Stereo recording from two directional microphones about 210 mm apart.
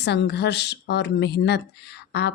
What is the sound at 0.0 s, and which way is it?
Speech, 55° left (ahead or behind).